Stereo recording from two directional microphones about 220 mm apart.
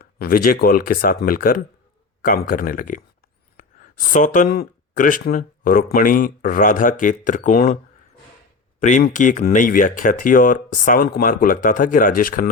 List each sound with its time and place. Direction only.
0.0 s speech: 40° left (ahead or behind)
8.8 s speech: 35° left (ahead or behind)